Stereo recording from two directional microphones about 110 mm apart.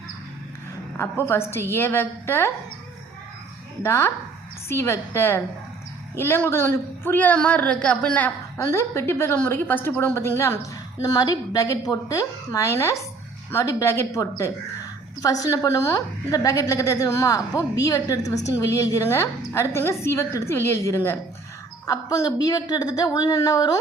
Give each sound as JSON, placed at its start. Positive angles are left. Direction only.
{"t": 1.2, "sound": "a woman's voice", "side_deg": 20}
{"t": 3.8, "sound": "a woman's voice", "side_deg": 25}
{"t": 8.5, "sound": "a woman's voice", "side_deg": 25}